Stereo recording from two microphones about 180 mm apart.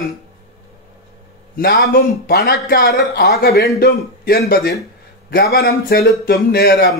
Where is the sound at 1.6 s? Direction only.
60° left (ahead or behind).